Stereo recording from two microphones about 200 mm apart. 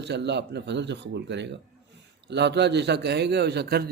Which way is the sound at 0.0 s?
60° right (ahead or behind).